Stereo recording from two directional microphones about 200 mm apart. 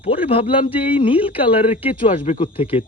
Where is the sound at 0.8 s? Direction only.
25° left (ahead or behind).